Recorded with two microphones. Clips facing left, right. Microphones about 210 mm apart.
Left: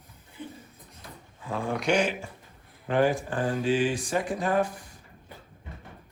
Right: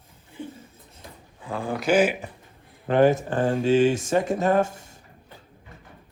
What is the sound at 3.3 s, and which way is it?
Mantra, 45° right (ahead or behind).